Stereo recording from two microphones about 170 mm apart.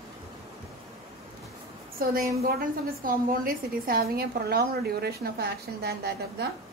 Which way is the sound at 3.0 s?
55° right (ahead or behind).